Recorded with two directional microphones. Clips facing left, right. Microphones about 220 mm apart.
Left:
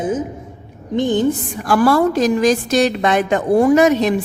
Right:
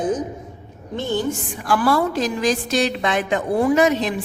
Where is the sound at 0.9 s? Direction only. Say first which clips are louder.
Left 7 dB; 15° left (ahead or behind).